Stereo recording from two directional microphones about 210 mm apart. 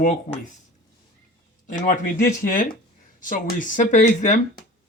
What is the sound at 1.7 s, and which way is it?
Speech, 35° left (ahead or behind).